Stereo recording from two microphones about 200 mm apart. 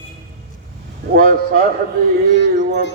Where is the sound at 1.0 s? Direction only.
55° right (ahead or behind).